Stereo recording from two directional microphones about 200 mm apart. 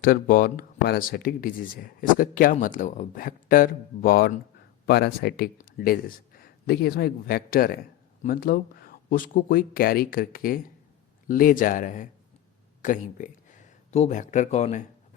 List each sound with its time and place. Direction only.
0.0 s speech: 45° left (ahead or behind)